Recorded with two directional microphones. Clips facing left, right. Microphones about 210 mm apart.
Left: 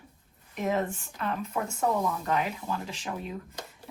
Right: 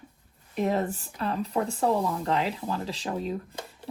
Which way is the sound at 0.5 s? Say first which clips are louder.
Right 2 dB; 30° right (ahead or behind).